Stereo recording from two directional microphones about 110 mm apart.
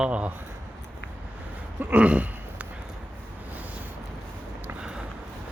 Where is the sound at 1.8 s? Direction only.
15° right (ahead or behind).